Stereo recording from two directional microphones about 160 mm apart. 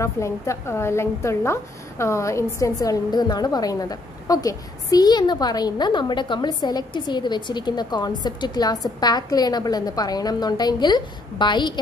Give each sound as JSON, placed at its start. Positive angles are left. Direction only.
{"t": 0.0, "sound": "a woman's voice", "side_deg": 20}